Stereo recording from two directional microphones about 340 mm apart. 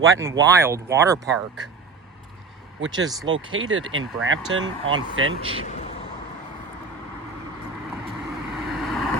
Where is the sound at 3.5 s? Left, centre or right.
Right.